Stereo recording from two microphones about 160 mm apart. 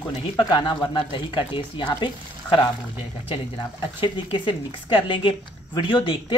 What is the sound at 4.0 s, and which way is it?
Speech, 30° left (ahead or behind).